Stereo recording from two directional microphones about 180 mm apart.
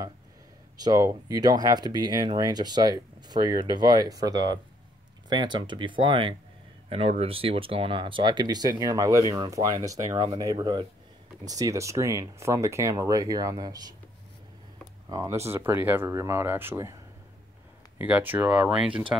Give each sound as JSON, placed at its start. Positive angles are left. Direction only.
{"t": 0.7, "sound": "speech", "side_deg": -20}
{"t": 15.0, "sound": "speech", "side_deg": -20}
{"t": 17.9, "sound": "speech", "side_deg": -10}